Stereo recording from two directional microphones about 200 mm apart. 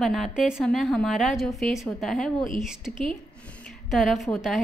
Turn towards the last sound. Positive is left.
turn(degrees=0)  # may be behind; listen again after turning